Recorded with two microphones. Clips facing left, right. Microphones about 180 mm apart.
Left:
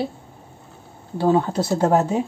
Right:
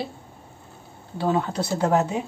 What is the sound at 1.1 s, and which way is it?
Speech, 35° left (ahead or behind).